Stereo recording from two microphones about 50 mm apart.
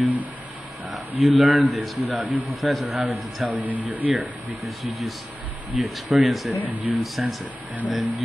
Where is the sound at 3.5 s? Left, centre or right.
Right.